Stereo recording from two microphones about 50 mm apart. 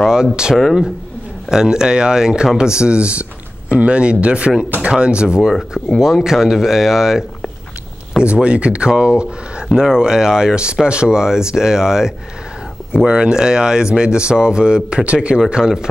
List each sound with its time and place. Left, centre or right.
0.0 s speech: centre
5.5 s speech: centre
6.2 s speech: centre
8.2 s speech: right